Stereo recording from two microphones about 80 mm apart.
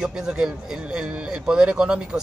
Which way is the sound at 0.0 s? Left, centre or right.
Centre.